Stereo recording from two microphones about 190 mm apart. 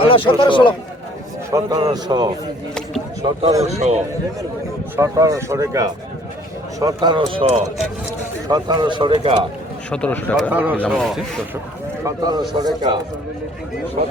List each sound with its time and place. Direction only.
0.0 s speech: 25° left (ahead or behind)
1.5 s a man's voice: 20° right (ahead or behind)
3.7 s a man's voice: 35° right (ahead or behind)
4.9 s speech: 15° right (ahead or behind); by 7.7 s 35° right (ahead or behind)
8.4 s speech: 20° right (ahead or behind)
9.9 s speech: 10° left (ahead or behind)
10.5 s speech: 10° right (ahead or behind)
10.8 s speech: 5° left (ahead or behind)
12.0 s speech: 20° right (ahead or behind)
14.0 s a man's voice: 35° right (ahead or behind)